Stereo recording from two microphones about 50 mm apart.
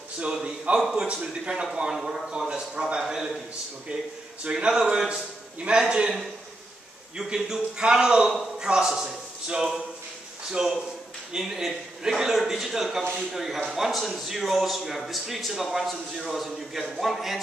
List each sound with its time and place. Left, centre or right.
0.2 s a man's voice: centre
3.0 s a man's voice: centre
7.2 s a man's voice: centre